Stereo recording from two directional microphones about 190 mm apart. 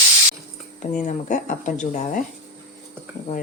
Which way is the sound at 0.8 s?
40° left (ahead or behind).